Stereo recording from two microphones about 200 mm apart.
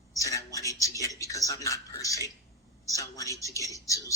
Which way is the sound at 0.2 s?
15° left (ahead or behind).